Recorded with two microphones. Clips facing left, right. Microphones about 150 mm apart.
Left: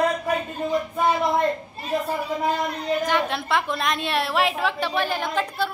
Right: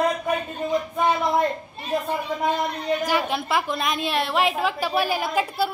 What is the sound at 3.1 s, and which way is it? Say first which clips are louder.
A woman's voice: even; 5° right (ahead or behind).